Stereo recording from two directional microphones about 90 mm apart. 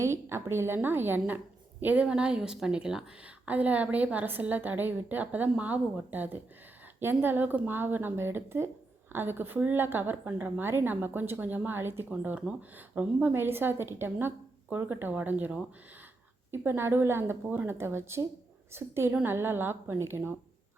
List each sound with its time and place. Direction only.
0.0 s a woman's voice: 30° right (ahead or behind)